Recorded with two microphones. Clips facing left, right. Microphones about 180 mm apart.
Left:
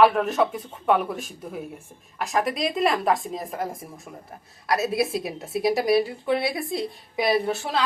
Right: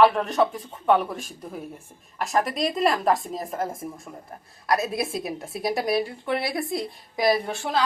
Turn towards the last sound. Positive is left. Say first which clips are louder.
# left 1 dB
turn(degrees=0)  # may be behind; listen again after turning